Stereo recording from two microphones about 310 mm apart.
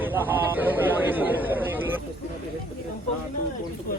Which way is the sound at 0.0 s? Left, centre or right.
Centre.